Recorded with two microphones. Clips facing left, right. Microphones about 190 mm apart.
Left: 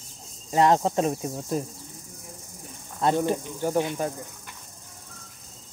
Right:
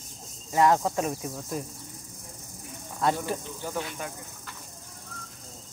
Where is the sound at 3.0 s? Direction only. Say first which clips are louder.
Left 3 dB; 25° left (ahead or behind).